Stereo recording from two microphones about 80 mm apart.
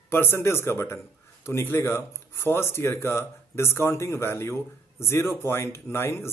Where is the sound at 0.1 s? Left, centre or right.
Left.